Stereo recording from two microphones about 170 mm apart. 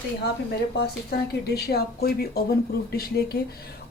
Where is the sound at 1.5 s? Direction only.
65° left (ahead or behind).